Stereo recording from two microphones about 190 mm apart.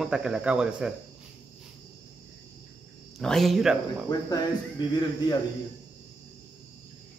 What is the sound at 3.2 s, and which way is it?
Speech, centre (ahead or behind).